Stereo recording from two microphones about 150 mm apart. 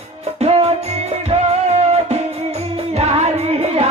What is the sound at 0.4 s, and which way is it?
Music, 40° right (ahead or behind).